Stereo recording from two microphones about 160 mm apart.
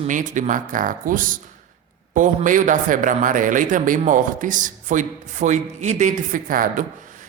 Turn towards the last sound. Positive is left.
turn(degrees=-60)  # may be behind; listen again after turning